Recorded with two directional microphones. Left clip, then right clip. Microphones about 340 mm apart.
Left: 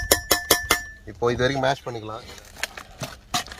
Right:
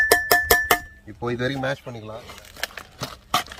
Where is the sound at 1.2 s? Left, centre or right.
Centre.